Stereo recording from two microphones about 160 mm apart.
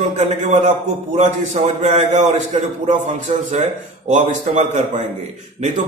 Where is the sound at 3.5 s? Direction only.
50° right (ahead or behind).